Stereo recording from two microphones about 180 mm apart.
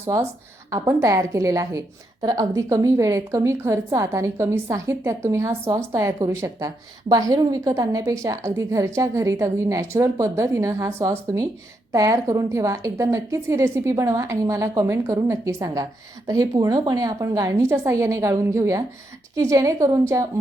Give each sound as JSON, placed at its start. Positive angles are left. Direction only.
{"t": 0.7, "sound": "a woman's voice", "side_deg": -15}